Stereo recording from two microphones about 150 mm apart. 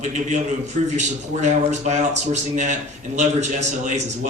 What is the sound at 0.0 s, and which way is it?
A man's voice, 50° right (ahead or behind).